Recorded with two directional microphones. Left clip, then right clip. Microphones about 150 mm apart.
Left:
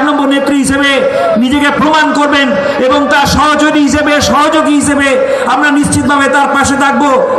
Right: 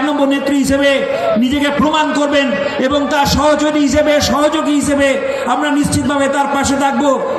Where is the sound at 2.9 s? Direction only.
35° right (ahead or behind).